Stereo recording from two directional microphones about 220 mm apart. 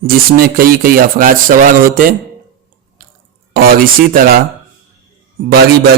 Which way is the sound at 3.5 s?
40° right (ahead or behind).